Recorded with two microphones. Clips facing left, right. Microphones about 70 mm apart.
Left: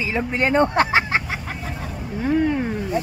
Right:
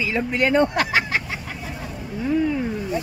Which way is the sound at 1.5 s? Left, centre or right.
Left.